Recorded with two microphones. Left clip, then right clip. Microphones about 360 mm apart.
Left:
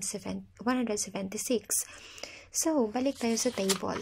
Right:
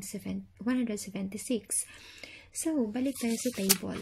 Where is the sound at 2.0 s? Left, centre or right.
Centre.